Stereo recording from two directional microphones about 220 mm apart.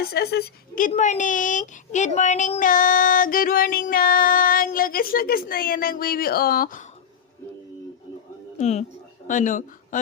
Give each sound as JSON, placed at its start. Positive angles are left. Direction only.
{"t": 0.0, "sound": "a woman's voice", "side_deg": 45}
{"t": 8.5, "sound": "speech", "side_deg": 30}